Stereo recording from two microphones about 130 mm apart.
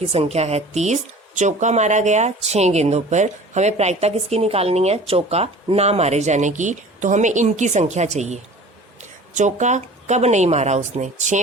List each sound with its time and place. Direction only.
0.1 s speech: 50° right (ahead or behind)